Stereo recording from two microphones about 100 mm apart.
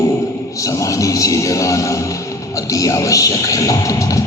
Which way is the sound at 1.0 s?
35° left (ahead or behind).